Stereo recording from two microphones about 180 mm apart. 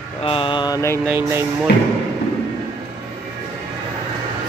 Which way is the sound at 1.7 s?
65° left (ahead or behind).